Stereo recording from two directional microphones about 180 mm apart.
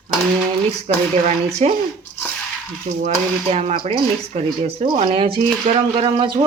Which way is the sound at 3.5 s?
40° right (ahead or behind).